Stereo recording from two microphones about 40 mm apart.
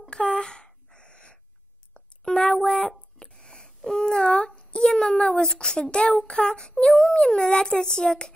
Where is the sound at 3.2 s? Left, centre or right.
Left.